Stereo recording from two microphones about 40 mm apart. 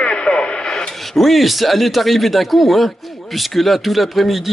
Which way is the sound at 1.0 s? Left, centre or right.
Centre.